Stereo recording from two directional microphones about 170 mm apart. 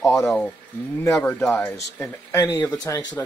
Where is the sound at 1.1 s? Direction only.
5° left (ahead or behind); by 3.1 s 25° left (ahead or behind).